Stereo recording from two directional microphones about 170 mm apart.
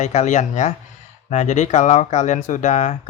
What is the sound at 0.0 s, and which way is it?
Speech, 45° left (ahead or behind).